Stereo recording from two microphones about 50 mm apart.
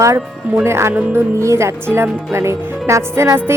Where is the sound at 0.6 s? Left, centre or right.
Right.